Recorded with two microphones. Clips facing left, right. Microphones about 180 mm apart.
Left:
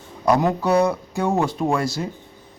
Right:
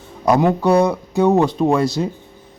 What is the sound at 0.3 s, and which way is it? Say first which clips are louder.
A man's voice: right 4 dB; 20° right (ahead or behind).